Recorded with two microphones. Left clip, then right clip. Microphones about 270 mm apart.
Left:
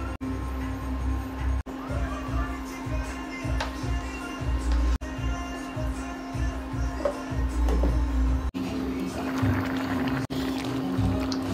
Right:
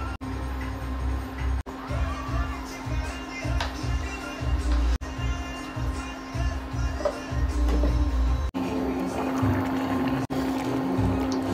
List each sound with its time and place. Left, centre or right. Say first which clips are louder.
8.6 s music: right 4 dB; centre